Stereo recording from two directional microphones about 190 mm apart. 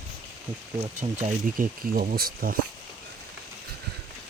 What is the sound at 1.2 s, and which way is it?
Speech, 45° right (ahead or behind).